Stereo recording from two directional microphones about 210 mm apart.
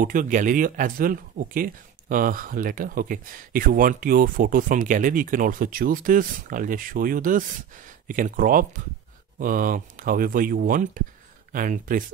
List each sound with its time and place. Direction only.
0.0 s speech: 40° right (ahead or behind)